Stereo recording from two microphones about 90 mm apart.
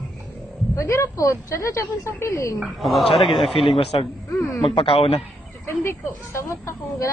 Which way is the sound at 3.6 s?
90° left.